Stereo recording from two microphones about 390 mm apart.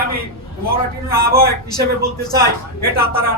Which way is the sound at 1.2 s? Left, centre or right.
Right.